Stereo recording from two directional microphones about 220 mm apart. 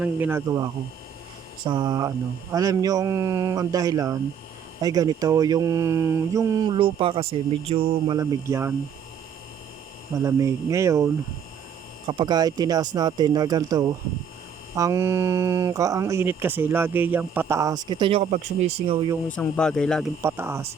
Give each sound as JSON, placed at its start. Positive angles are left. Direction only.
{"t": 0.0, "sound": "speech", "side_deg": -10}
{"t": 10.2, "sound": "speech", "side_deg": -15}
{"t": 19.3, "sound": "speech", "side_deg": 5}
{"t": 20.2, "sound": "speech", "side_deg": -10}